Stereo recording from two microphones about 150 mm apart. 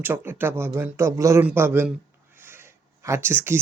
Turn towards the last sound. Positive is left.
turn(degrees=-15)  # may be behind; listen again after turning